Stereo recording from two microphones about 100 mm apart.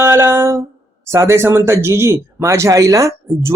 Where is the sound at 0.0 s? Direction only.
25° right (ahead or behind).